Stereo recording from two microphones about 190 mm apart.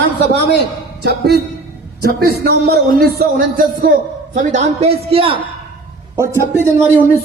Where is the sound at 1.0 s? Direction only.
55° right (ahead or behind); by 5.4 s 30° right (ahead or behind).